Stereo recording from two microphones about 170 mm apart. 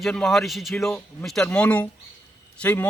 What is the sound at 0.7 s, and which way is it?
A man's voice, 10° left (ahead or behind).